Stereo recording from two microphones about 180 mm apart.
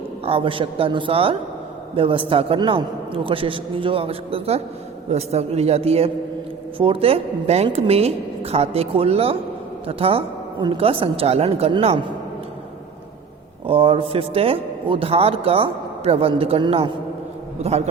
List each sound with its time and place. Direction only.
0.3 s a man's voice: 30° right (ahead or behind)
13.7 s a man's voice: 30° right (ahead or behind)